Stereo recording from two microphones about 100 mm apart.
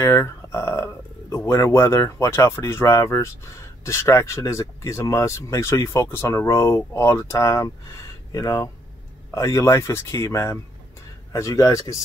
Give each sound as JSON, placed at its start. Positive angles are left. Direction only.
{"t": 0.0, "sound": "speech", "side_deg": 30}